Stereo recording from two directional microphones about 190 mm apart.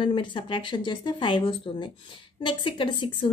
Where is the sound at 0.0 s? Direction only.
25° left (ahead or behind).